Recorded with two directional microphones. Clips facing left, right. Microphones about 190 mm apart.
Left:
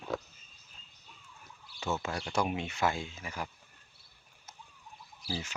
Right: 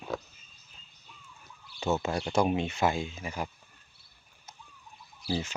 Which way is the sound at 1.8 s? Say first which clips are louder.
Right 6 dB; 25° right (ahead or behind).